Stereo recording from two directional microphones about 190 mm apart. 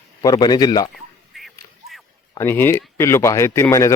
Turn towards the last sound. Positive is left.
turn(degrees=15)  # may be behind; listen again after turning